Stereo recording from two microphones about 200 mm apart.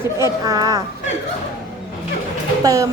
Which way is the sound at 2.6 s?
15° right (ahead or behind).